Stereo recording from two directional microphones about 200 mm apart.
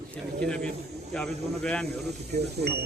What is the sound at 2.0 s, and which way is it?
Speech, 55° right (ahead or behind).